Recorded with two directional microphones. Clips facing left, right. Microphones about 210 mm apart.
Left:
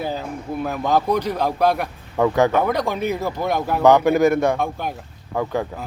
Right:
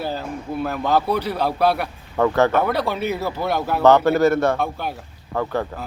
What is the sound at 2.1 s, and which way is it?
Speech, 10° left (ahead or behind).